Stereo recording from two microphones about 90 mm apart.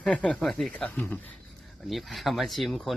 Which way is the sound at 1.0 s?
20° left (ahead or behind).